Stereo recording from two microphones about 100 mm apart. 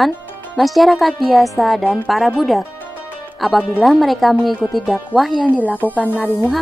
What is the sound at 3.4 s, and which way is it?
Speech, centre (ahead or behind).